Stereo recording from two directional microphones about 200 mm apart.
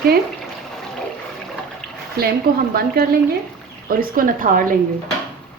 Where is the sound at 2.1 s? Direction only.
50° right (ahead or behind).